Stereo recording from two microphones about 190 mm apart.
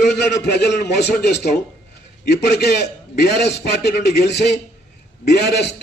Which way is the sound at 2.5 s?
60° left (ahead or behind).